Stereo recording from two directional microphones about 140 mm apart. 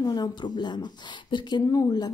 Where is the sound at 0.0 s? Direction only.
30° left (ahead or behind).